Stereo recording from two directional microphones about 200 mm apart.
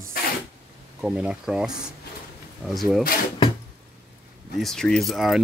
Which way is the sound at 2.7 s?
Centre (ahead or behind).